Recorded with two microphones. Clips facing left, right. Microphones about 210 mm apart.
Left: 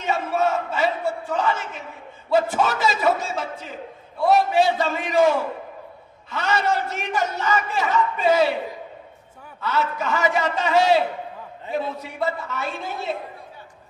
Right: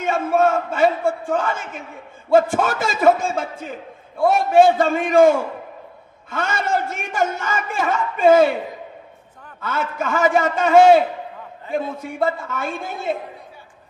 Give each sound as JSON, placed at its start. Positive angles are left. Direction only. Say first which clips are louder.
{"t": 0.0, "sound": "a man's voice", "louder": "right 5 dB", "side_deg": -50}
{"t": 9.6, "sound": "a man's voice", "louder": "even", "side_deg": -50}